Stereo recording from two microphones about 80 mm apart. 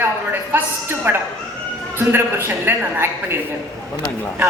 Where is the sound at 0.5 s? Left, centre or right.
Right.